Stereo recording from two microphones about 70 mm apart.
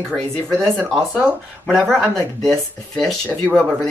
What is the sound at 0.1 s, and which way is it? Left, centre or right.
Speech, centre.